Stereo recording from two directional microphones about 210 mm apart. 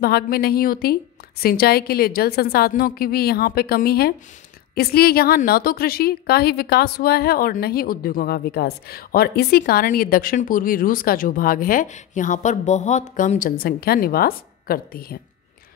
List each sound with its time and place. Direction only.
0.0 s a woman's voice: 45° left (ahead or behind)